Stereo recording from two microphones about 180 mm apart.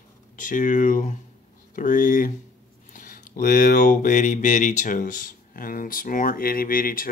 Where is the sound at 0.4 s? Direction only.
50° left (ahead or behind).